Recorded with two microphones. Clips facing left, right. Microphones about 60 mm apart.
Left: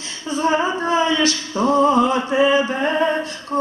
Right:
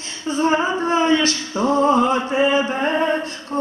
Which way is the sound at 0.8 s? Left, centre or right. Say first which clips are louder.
Right 2 dB; right.